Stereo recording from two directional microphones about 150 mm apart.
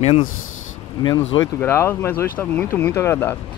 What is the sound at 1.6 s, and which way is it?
Speech, 15° left (ahead or behind).